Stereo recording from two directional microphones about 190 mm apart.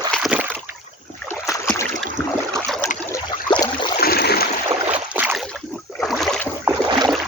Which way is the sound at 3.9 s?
55° left (ahead or behind).